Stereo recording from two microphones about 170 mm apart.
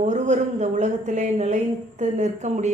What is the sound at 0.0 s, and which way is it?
A woman's voice, 45° right (ahead or behind).